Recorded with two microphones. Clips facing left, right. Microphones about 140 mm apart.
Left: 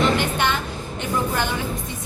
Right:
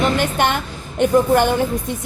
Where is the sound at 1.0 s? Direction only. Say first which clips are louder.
Right 10 dB; 55° right (ahead or behind).